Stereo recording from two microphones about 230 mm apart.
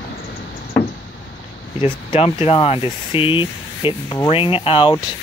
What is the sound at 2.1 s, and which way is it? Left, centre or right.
Speech, left.